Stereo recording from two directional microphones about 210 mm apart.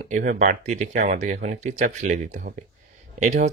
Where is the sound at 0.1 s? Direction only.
35° right (ahead or behind).